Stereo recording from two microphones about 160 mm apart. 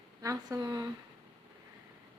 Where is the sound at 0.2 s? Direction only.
20° right (ahead or behind).